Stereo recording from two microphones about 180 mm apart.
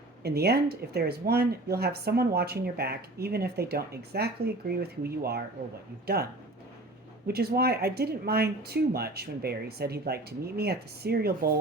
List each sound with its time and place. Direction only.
0.2 s speech: 60° right (ahead or behind)
7.3 s speech: 60° right (ahead or behind)